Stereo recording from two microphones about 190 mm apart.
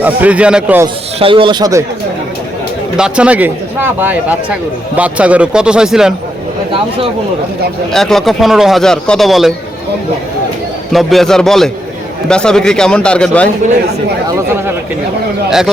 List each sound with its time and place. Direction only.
0.0 s a man's voice: 10° right (ahead or behind)
1.2 s a man's voice: 30° right (ahead or behind)
3.0 s a man's voice: 5° right (ahead or behind)
7.9 s a man's voice: centre (ahead or behind)
10.9 s a man's voice: centre (ahead or behind)
15.4 s a man's voice: 5° right (ahead or behind)